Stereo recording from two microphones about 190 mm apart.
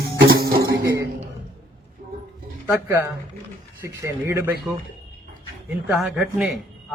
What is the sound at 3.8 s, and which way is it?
Speech, 15° right (ahead or behind).